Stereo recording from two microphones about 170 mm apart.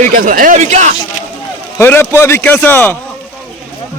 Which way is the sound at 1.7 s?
15° left (ahead or behind).